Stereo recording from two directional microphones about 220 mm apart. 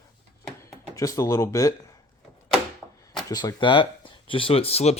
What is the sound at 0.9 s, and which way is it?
Speech, 15° left (ahead or behind).